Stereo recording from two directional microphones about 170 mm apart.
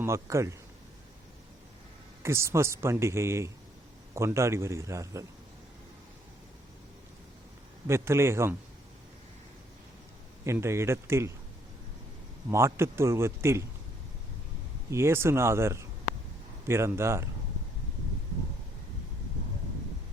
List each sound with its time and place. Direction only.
0.0 s a man's voice: 15° right (ahead or behind)
2.2 s a man's voice: 15° right (ahead or behind)
7.9 s a man's voice: 15° right (ahead or behind)
10.4 s a man's voice: 15° right (ahead or behind)
12.5 s a man's voice: 15° right (ahead or behind)
14.8 s a man's voice: 15° right (ahead or behind)